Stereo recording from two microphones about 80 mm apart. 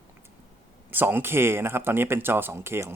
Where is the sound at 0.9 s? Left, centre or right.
Right.